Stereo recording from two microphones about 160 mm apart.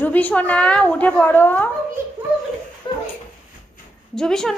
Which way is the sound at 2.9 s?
25° left (ahead or behind).